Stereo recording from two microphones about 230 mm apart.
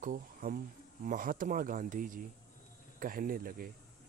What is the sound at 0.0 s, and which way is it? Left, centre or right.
Speech, right.